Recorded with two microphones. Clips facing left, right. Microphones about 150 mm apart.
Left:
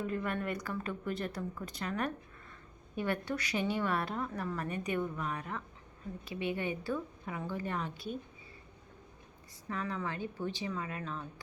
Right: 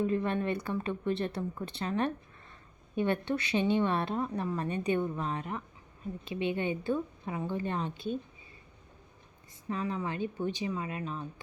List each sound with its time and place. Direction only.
0.0 s a woman's voice: 25° right (ahead or behind)
9.6 s a woman's voice: 20° right (ahead or behind)